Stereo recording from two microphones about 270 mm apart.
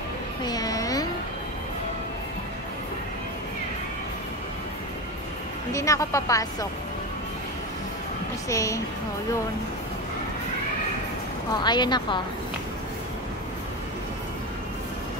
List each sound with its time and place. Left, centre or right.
0.4 s a sound: centre
5.7 s a woman's voice: centre
8.5 s a woman's voice: centre
11.6 s a woman's voice: centre